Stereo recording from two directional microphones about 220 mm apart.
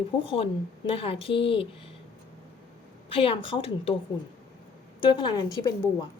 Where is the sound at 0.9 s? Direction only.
25° left (ahead or behind).